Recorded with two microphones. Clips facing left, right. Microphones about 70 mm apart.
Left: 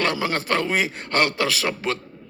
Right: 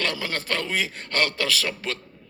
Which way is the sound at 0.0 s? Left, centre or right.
Centre.